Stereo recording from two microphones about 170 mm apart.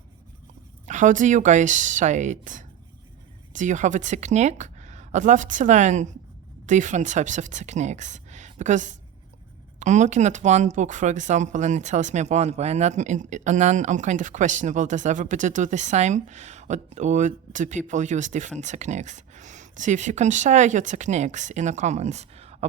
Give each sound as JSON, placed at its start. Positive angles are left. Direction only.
{"t": 0.9, "sound": "a woman's voice", "side_deg": -45}